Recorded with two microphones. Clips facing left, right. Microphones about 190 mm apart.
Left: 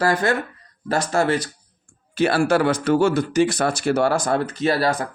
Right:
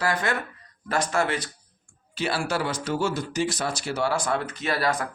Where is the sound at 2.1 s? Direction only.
50° left (ahead or behind); by 5.1 s 30° left (ahead or behind).